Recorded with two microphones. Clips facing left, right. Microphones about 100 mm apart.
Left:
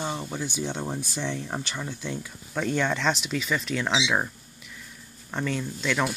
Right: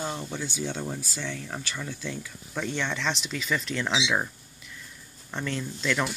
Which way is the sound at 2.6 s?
45° left (ahead or behind).